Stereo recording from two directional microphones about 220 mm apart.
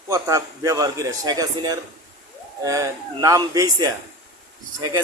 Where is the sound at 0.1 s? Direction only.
15° right (ahead or behind).